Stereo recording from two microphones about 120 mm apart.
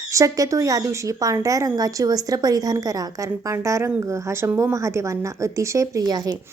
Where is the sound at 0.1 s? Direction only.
25° right (ahead or behind).